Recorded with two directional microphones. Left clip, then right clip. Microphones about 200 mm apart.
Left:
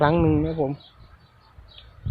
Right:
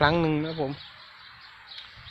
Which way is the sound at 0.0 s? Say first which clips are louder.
Left 3 dB; 20° right (ahead or behind).